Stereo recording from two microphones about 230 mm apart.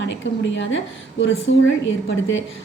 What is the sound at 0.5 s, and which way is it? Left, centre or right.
A woman's voice, left.